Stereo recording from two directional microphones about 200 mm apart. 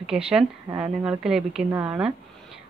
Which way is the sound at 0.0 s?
5° right (ahead or behind).